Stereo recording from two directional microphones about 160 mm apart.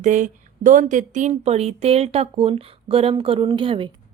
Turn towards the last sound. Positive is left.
turn(degrees=-35)  # may be behind; listen again after turning